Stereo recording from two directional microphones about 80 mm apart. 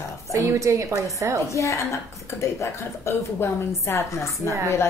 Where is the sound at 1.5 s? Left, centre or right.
Left.